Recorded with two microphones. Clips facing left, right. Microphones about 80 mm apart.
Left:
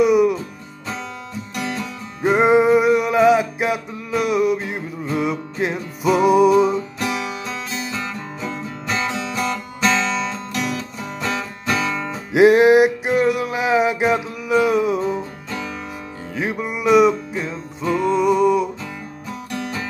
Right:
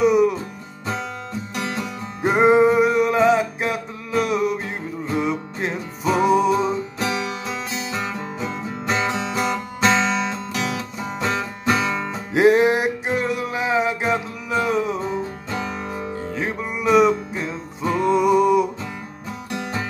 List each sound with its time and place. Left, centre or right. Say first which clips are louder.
0.0 s music: left 2 dB; centre
1.6 s music: left 1 dB; right
2.2 s music: even; centre
7.0 s music: even; right
12.3 s music: left 4 dB; centre
16.3 s music: left 5 dB; centre
17.5 s music: left 2 dB; centre